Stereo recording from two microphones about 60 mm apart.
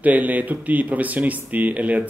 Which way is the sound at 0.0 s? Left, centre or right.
Right.